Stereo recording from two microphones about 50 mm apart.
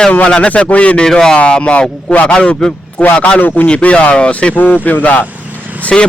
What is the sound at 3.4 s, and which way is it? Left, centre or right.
Speech, left.